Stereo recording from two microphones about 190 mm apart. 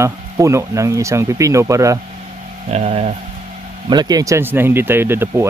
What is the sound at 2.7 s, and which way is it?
Speech, 35° right (ahead or behind).